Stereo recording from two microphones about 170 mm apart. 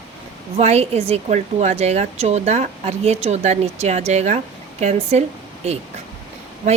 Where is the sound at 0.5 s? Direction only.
40° right (ahead or behind).